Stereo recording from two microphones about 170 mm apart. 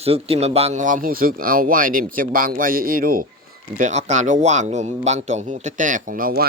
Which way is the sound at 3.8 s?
45° right (ahead or behind).